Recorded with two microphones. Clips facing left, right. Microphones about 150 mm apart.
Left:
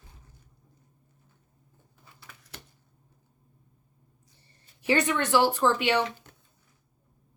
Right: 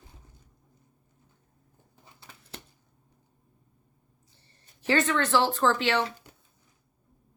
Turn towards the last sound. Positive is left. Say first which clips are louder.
# left 1 dB
turn(degrees=15)  # may be behind; listen again after turning